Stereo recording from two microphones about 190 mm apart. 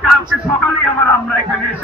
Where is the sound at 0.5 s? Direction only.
5° left (ahead or behind).